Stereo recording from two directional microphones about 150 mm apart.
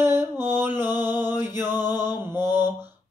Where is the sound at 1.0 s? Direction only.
30° left (ahead or behind).